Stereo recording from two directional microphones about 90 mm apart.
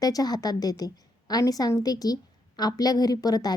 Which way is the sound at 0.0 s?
45° left (ahead or behind).